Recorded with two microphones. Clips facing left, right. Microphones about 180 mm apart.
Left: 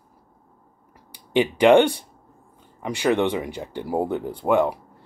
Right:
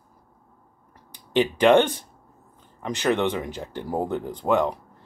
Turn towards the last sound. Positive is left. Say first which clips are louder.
# left 2 dB
turn(degrees=10)  # may be behind; listen again after turning